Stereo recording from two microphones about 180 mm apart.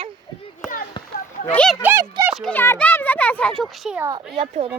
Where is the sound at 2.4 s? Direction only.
10° left (ahead or behind).